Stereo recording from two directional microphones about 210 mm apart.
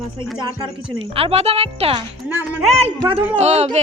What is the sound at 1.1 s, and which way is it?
Speech, 30° right (ahead or behind).